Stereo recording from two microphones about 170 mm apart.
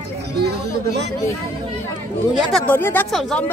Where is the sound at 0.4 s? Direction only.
80° right.